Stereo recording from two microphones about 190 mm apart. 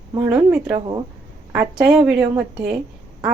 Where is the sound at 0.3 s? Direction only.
5° right (ahead or behind).